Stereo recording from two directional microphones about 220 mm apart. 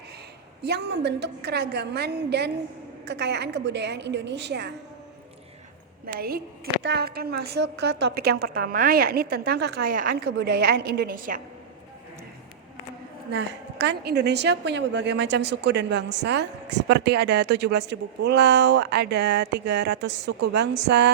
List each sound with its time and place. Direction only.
0.6 s a woman's voice: 50° right (ahead or behind)
6.1 s a woman's voice: 45° right (ahead or behind)
10.2 s a woman's voice: 55° right (ahead or behind)
13.3 s a woman's voice: 50° right (ahead or behind)